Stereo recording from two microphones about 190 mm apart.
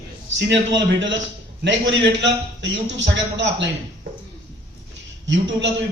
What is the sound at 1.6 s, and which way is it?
A man's voice, 70° right (ahead or behind).